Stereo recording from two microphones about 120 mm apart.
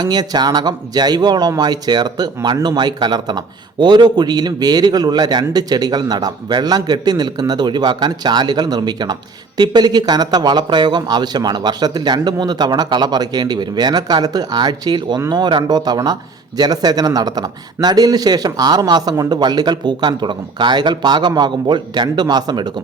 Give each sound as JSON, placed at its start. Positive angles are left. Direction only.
{"t": 0.0, "sound": "a man's voice", "side_deg": -35}